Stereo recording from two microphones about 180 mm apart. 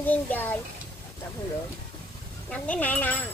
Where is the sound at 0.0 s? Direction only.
10° left (ahead or behind).